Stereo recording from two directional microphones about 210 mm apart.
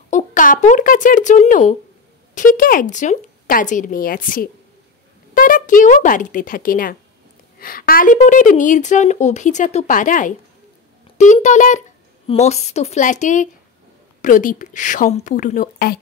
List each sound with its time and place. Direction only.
0.1 s a woman's voice: 35° left (ahead or behind)